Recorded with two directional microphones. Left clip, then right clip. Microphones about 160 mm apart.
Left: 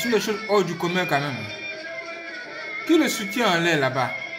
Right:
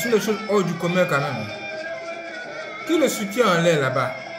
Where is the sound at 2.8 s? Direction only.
45° left (ahead or behind).